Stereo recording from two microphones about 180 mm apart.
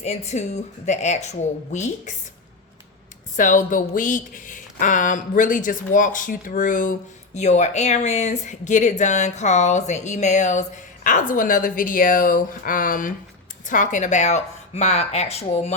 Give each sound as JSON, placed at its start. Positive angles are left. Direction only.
{"t": 0.0, "sound": "speech", "side_deg": 35}
{"t": 3.3, "sound": "speech", "side_deg": 45}